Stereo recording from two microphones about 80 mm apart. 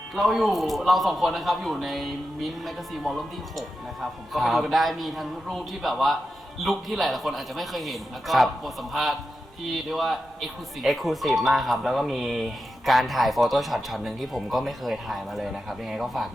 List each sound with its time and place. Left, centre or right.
0.2 s speech: centre
4.3 s speech: centre